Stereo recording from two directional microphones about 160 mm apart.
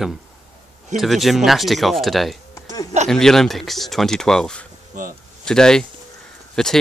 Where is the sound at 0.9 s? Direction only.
Centre (ahead or behind).